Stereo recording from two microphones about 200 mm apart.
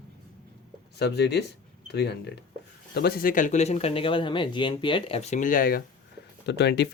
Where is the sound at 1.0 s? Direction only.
55° left (ahead or behind).